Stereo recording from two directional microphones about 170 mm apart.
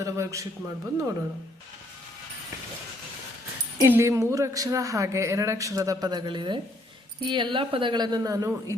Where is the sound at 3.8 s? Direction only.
15° right (ahead or behind).